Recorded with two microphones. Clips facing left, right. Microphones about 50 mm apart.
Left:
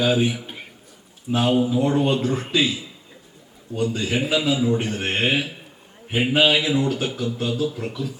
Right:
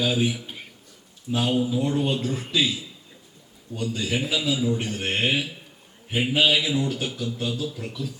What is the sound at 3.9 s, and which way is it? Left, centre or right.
Speech, centre.